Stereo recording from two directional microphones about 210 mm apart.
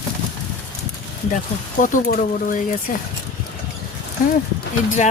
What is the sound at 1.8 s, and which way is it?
Speech, 40° left (ahead or behind).